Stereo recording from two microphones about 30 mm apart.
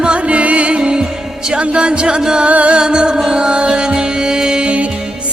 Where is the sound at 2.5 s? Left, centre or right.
Right.